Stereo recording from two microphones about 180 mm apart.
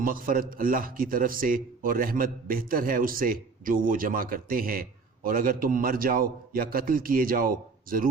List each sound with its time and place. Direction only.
0.0 s a man's voice: 50° right (ahead or behind)